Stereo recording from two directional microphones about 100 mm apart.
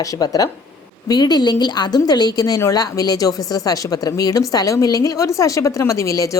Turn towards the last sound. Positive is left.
turn(degrees=35)  # may be behind; listen again after turning